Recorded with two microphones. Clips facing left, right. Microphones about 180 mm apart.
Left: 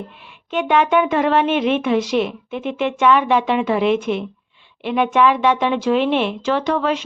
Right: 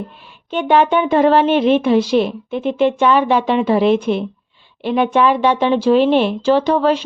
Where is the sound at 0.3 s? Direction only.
35° right (ahead or behind).